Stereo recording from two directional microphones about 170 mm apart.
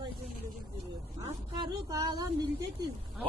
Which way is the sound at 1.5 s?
25° right (ahead or behind).